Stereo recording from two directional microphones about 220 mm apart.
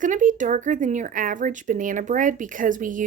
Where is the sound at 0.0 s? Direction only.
35° right (ahead or behind).